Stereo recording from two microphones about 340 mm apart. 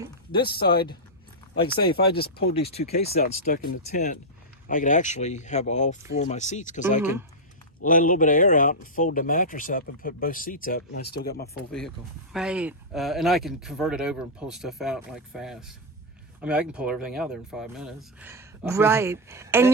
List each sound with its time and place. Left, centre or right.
0.3 s speech: centre
0.5 s speech: left
2.0 s speech: left
2.3 s speech: centre
7.0 s speech: centre
7.9 s speech: left
12.3 s speech: centre